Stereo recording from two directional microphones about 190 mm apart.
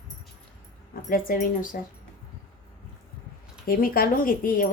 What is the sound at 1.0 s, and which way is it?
Speech, 50° left (ahead or behind).